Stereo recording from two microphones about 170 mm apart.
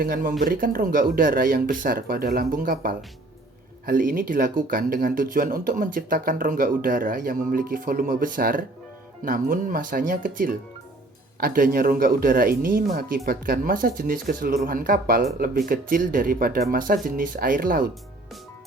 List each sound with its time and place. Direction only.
0.0 s speech: 60° right (ahead or behind)
3.8 s speech: 55° right (ahead or behind)